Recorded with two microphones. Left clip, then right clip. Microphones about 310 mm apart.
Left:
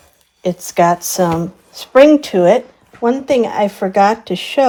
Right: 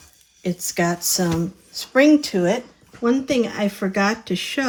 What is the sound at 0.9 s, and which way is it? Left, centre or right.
Speech, left.